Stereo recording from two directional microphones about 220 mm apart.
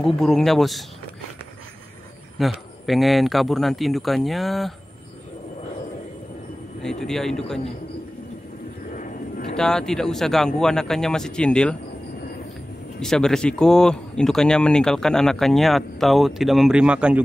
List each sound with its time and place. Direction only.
0.0 s speech: centre (ahead or behind)
2.3 s speech: centre (ahead or behind)
6.8 s speech: centre (ahead or behind)
8.9 s vehicle: 35° left (ahead or behind)
9.6 s speech: 5° left (ahead or behind)
13.0 s speech: centre (ahead or behind)